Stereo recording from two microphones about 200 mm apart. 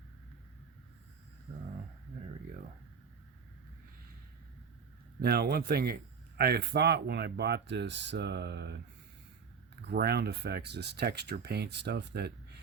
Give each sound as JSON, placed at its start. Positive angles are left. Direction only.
{"t": 5.2, "sound": "a man's voice", "side_deg": -50}
{"t": 9.8, "sound": "a man's voice", "side_deg": -55}